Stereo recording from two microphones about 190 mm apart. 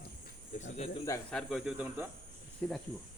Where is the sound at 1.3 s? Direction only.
Centre (ahead or behind).